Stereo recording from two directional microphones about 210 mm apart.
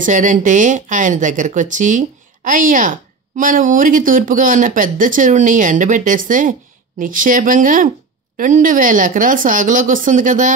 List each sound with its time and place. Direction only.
0.0 s speech: 35° right (ahead or behind)